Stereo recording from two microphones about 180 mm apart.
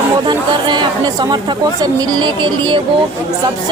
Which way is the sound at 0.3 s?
25° right (ahead or behind).